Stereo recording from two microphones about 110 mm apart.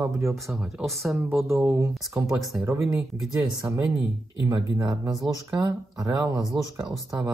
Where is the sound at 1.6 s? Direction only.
25° right (ahead or behind); by 6.9 s 45° right (ahead or behind).